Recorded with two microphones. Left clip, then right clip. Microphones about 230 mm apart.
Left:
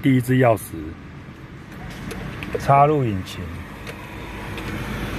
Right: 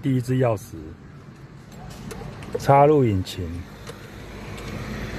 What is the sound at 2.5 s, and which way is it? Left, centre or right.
Speech, right.